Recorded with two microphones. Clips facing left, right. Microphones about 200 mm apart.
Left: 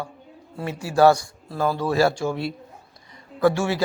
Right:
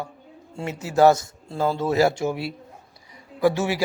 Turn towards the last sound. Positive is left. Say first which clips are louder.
# left 1 dB
turn(degrees=-15)  # may be behind; listen again after turning